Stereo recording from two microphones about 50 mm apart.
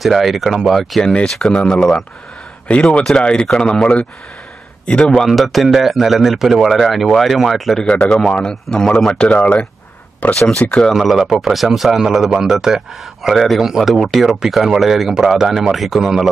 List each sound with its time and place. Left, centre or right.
0.0 s a man's voice: centre
1.0 s speech: centre
2.7 s speech: left
5.0 s a man's voice: centre
8.4 s speech: centre
9.1 s speech: left
10.3 s speech: centre
10.9 s a man's voice: centre